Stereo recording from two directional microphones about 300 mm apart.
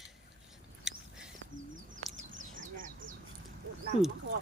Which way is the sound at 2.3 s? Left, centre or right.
Right.